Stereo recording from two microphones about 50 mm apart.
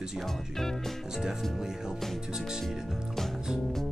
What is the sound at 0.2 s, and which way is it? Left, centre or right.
Speech, centre.